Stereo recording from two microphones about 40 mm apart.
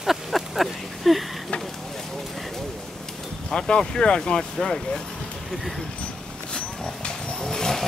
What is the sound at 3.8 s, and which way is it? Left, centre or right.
Speech, centre.